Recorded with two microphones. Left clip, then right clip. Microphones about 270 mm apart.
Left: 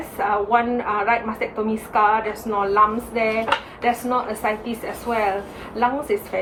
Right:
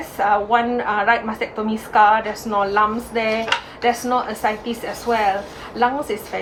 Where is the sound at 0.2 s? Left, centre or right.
Centre.